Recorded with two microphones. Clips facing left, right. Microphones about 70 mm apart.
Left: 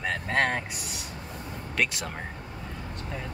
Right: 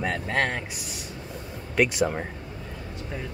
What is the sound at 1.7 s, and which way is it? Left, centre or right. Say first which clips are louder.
Speech: right 7 dB; centre.